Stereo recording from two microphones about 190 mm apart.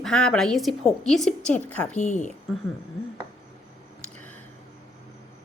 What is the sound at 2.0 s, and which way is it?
Speech, 40° left (ahead or behind).